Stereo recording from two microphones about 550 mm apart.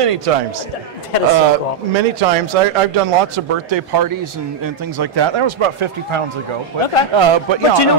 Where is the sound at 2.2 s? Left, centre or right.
Right.